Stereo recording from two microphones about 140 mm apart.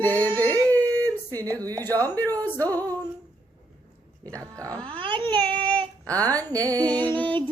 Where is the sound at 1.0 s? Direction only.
25° right (ahead or behind).